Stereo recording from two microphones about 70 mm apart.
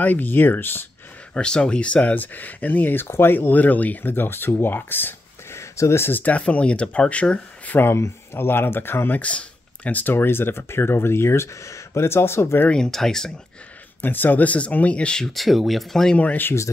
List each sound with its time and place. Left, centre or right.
0.0 s speech: left
1.3 s speech: centre; by 5.6 s left
5.6 s speech: left
9.2 s speech: centre
10.1 s speech: left
12.6 s speech: centre
14.0 s speech: left; by 16.2 s centre
16.2 s speech: left